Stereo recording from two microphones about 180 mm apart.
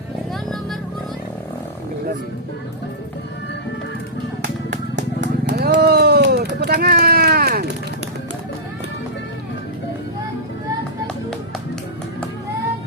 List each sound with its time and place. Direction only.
5.2 s vehicle: 70° right (ahead or behind)
6.7 s run: 60° right (ahead or behind)